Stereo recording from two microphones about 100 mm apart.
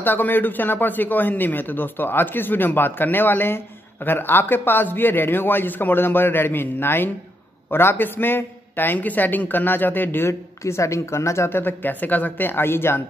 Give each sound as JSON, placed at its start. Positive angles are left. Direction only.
{"t": 0.0, "sound": "a man's voice", "side_deg": 20}